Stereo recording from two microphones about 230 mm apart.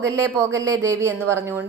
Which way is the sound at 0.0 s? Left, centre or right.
Centre.